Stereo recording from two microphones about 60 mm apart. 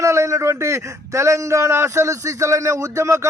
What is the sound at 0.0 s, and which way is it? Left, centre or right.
A man's voice, right.